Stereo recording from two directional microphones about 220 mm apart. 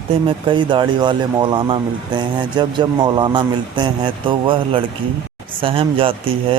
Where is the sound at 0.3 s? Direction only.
20° right (ahead or behind).